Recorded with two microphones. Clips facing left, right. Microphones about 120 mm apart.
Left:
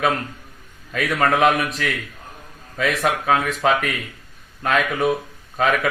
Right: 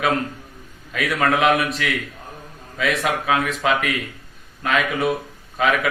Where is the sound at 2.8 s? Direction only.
Centre (ahead or behind).